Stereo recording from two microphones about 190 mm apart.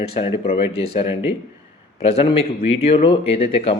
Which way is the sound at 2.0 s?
30° left (ahead or behind).